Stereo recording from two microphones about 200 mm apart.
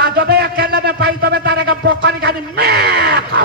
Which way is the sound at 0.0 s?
55° right (ahead or behind).